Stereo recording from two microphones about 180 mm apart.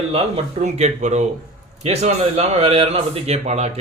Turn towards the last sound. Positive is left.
turn(degrees=-35)  # may be behind; listen again after turning